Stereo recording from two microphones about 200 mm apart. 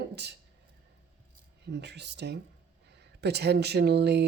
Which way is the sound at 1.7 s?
60° right (ahead or behind).